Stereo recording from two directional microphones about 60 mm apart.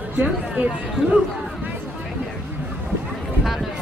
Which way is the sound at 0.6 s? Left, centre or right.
Right.